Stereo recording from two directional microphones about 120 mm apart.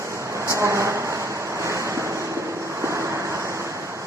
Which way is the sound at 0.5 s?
25° right (ahead or behind).